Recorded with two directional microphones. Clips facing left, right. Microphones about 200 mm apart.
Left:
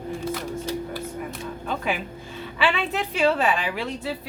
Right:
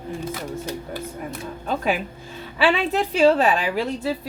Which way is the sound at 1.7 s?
40° right (ahead or behind).